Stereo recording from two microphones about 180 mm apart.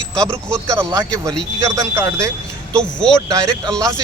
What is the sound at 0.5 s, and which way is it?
A man's voice, 15° right (ahead or behind).